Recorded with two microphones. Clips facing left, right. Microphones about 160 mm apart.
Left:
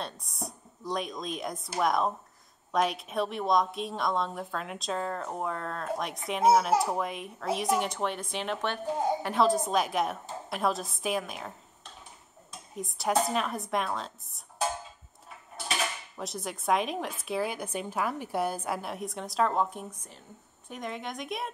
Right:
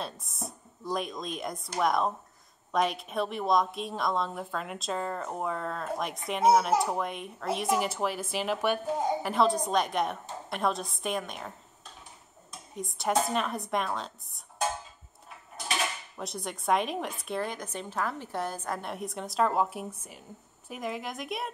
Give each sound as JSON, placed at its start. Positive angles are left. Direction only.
{"t": 0.0, "sound": "a woman's voice", "side_deg": 0}
{"t": 12.7, "sound": "a woman's voice", "side_deg": 0}
{"t": 16.2, "sound": "a woman's voice", "side_deg": 0}